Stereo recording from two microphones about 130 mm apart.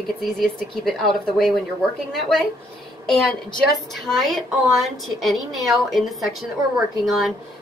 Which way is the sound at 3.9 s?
Centre (ahead or behind).